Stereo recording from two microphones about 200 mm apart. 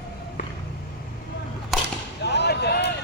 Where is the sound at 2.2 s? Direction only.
55° left (ahead or behind).